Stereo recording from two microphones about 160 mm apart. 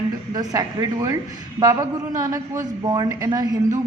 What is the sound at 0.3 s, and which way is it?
A woman's voice, 25° right (ahead or behind).